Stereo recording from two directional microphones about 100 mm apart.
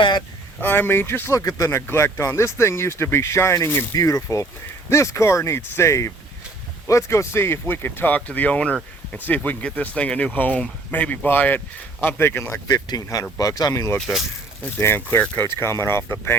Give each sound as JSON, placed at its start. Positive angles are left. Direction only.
{"t": 0.6, "sound": "speech", "side_deg": 20}
{"t": 12.6, "sound": "speech", "side_deg": 40}
{"t": 14.6, "sound": "speech", "side_deg": 25}